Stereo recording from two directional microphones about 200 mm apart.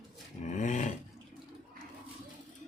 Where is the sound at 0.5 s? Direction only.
40° left (ahead or behind).